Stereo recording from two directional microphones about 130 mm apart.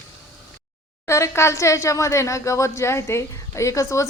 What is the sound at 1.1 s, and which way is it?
A woman's voice, 20° left (ahead or behind).